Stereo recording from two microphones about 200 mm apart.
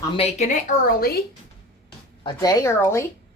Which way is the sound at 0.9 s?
50° left (ahead or behind).